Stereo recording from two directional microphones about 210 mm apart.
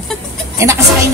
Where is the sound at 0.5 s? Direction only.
15° right (ahead or behind).